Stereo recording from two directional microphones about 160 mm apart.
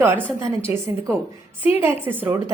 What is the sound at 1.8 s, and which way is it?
Speech, 10° right (ahead or behind).